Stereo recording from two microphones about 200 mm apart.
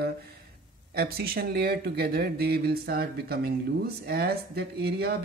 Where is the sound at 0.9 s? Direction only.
50° right (ahead or behind).